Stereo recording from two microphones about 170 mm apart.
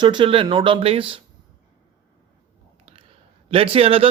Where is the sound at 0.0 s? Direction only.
25° right (ahead or behind).